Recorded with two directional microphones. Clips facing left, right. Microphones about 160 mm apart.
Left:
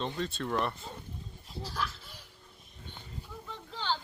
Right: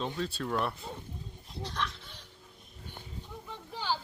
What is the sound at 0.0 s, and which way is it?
Speech, centre (ahead or behind).